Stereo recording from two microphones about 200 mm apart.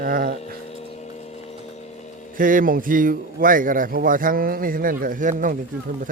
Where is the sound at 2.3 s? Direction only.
45° right (ahead or behind).